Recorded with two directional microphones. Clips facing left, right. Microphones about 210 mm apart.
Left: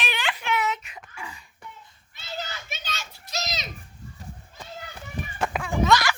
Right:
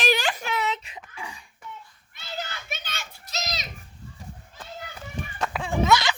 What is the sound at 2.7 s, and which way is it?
Children playing, 55° right (ahead or behind).